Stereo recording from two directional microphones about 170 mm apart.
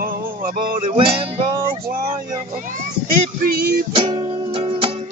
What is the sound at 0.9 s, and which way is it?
Music, 30° right (ahead or behind).